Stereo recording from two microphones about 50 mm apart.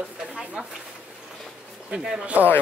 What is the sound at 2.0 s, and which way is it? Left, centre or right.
Speech, centre.